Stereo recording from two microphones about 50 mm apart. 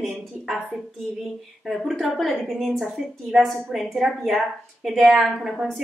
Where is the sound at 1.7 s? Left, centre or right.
Centre.